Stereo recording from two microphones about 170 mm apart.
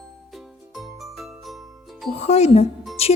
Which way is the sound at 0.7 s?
Centre (ahead or behind).